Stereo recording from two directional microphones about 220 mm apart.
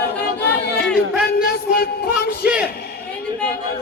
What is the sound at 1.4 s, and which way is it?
Music, 45° left (ahead or behind).